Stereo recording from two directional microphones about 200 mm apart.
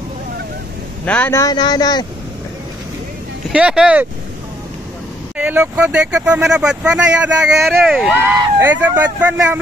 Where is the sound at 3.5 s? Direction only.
5° right (ahead or behind).